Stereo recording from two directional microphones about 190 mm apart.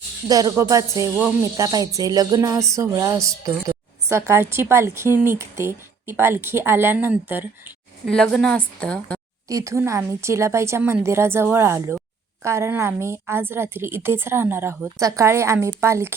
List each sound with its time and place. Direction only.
0.3 s speech: 20° right (ahead or behind)
8.0 s a woman's voice: 5° left (ahead or behind)
9.5 s speech: 15° right (ahead or behind)